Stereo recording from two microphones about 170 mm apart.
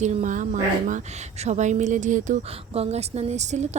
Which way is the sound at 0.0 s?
45° right (ahead or behind).